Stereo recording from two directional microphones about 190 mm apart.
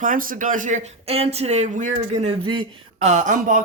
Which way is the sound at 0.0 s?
45° right (ahead or behind).